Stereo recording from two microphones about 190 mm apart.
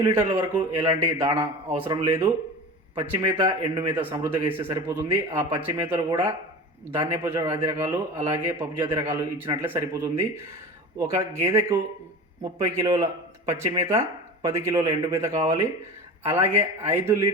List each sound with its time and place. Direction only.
0.0 s speech: 15° right (ahead or behind)
1.0 s a man's voice: 25° right (ahead or behind)
1.4 s speech: 10° right (ahead or behind)
3.3 s speech: 20° right (ahead or behind)